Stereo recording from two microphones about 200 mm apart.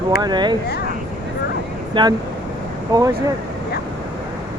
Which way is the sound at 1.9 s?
20° right (ahead or behind).